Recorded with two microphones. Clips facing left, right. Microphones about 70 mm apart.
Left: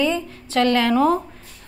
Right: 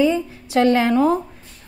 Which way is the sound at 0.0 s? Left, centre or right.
Centre.